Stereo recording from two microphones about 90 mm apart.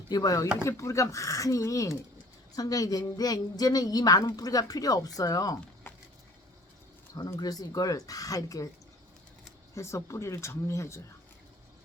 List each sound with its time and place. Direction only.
0.1 s speech: 40° left (ahead or behind)
7.3 s speech: 45° left (ahead or behind)
9.7 s speech: 35° left (ahead or behind)